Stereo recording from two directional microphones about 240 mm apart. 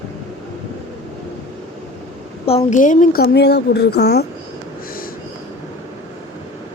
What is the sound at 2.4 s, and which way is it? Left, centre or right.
A woman's voice, left.